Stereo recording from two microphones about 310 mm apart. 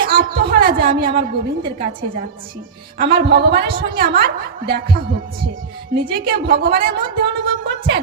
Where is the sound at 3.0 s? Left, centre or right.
Right.